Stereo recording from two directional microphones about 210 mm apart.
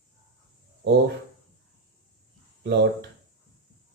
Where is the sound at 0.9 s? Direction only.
50° right (ahead or behind).